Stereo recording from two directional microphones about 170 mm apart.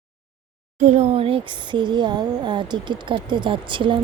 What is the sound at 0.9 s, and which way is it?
Speech, 40° right (ahead or behind).